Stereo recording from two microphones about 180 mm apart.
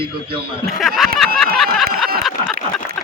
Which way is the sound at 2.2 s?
Centre (ahead or behind).